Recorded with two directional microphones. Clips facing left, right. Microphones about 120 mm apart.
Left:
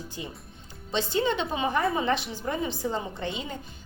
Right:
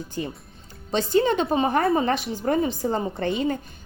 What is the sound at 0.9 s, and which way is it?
A woman's voice, 45° right (ahead or behind).